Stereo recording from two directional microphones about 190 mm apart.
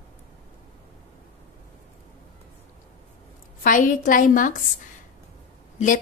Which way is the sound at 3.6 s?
45° left (ahead or behind).